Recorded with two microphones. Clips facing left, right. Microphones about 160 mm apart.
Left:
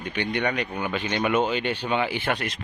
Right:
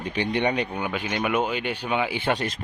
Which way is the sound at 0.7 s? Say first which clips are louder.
Left 1 dB; 15° right (ahead or behind).